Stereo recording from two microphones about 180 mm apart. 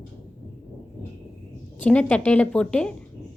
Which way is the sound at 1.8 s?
10° left (ahead or behind).